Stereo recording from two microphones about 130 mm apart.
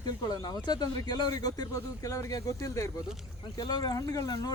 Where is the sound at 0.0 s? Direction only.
30° left (ahead or behind).